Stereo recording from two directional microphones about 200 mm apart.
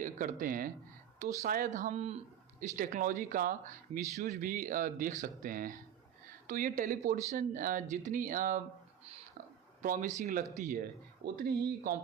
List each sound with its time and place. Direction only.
0.3 s speech: 45° right (ahead or behind)
9.8 s speech: 40° right (ahead or behind)
11.3 s speech: 50° right (ahead or behind)